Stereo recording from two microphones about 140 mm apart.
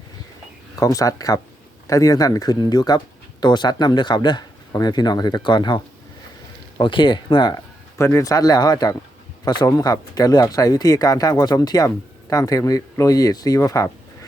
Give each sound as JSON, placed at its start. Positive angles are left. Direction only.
{"t": 0.8, "sound": "a man's voice", "side_deg": 25}
{"t": 7.9, "sound": "speech", "side_deg": 20}